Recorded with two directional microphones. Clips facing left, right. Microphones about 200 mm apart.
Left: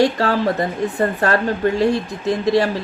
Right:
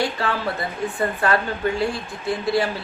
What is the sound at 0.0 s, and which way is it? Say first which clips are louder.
Speech: left 7 dB; 40° left (ahead or behind).